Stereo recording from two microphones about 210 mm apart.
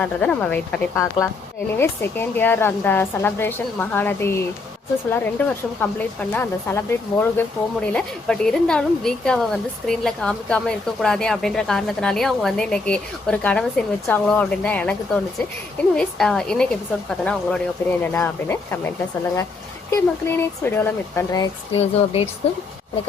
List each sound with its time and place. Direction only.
0.0 s a woman's voice: 5° left (ahead or behind)
19.9 s a woman's voice: 10° left (ahead or behind)
21.8 s a woman's voice: 30° left (ahead or behind)